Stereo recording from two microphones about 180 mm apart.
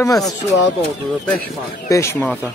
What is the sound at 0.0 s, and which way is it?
Speech, 20° left (ahead or behind).